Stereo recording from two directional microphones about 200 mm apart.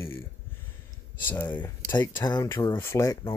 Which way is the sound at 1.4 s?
15° left (ahead or behind).